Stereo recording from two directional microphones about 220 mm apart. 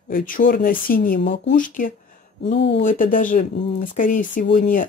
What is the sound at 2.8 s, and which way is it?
Speech, 40° left (ahead or behind).